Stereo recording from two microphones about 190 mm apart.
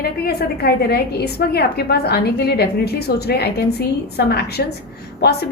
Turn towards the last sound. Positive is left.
turn(degrees=55)  # may be behind; listen again after turning